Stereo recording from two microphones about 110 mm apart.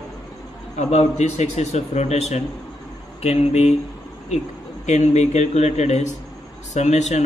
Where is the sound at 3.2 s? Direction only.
75° left (ahead or behind).